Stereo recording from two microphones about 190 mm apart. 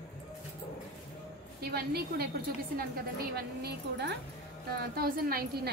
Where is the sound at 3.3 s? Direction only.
60° right (ahead or behind).